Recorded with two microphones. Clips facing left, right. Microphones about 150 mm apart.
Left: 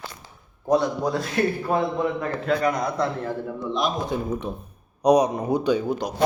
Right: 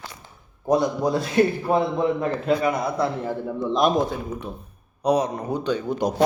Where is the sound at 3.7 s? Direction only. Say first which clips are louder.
Right 5 dB; 50° right (ahead or behind).